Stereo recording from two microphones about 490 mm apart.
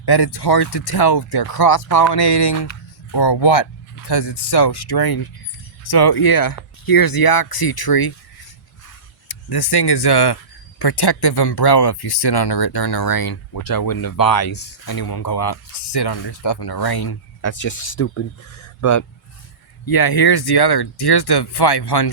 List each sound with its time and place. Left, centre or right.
0.0 s speech: left
9.3 s speech: left
19.8 s speech: left